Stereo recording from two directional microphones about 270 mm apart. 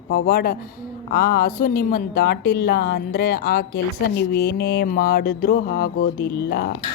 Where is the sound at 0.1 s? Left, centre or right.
Left.